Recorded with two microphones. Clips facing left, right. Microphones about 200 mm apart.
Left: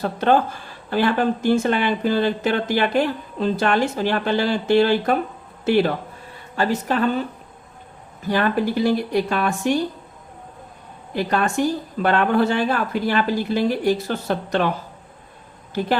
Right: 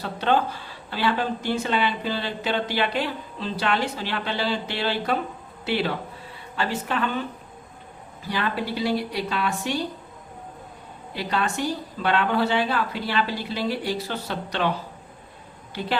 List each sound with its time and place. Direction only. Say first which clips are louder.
0.0 s a woman's voice: left 5 dB; 45° left (ahead or behind)
8.3 s speech: left 7 dB; 50° left (ahead or behind)
11.1 s speech: left 5 dB; 50° left (ahead or behind)